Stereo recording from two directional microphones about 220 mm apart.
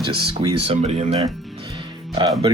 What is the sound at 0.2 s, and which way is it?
Speech, 25° right (ahead or behind).